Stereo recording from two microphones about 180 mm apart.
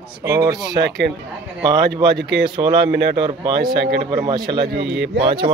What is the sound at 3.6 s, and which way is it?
A man's voice, 65° right (ahead or behind).